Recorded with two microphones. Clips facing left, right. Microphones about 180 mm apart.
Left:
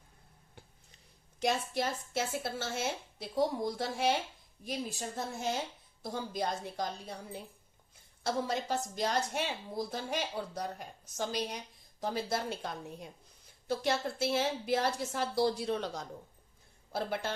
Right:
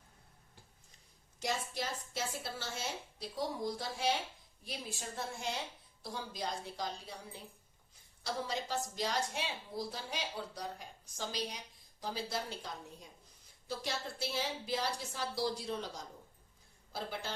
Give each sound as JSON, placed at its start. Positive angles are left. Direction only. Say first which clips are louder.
{"t": 1.4, "sound": "a woman's voice", "louder": "left 6 dB", "side_deg": 60}
{"t": 8.2, "sound": "a woman's voice", "louder": "left 5 dB", "side_deg": 55}